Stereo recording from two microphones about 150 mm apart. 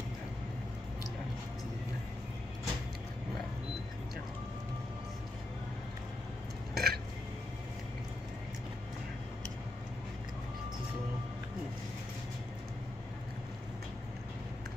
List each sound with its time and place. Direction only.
6.7 s burping: 90° right